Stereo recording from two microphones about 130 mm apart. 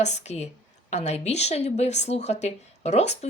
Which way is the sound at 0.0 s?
60° left (ahead or behind).